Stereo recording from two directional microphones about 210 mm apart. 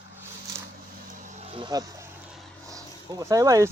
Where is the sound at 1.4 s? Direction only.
25° right (ahead or behind).